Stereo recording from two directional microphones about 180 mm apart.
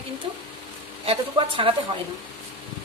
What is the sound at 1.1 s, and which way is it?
Speech, 30° right (ahead or behind).